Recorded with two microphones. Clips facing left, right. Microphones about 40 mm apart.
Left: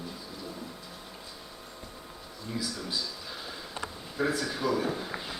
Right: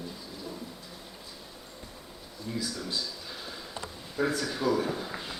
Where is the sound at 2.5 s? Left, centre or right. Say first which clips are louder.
Right 1 dB; centre.